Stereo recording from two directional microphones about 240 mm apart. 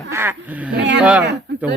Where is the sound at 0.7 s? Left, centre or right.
Right.